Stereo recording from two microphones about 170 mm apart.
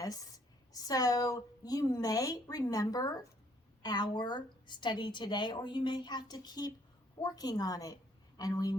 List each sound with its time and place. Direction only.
0.0 s a woman's voice: 20° left (ahead or behind)